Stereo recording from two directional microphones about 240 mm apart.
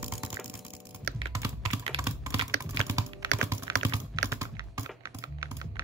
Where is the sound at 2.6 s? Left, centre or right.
Centre.